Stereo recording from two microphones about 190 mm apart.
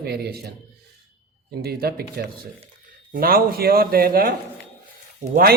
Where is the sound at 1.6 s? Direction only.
55° right (ahead or behind).